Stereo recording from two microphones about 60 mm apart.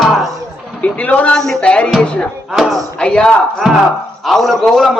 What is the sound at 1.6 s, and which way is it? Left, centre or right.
Speech, centre.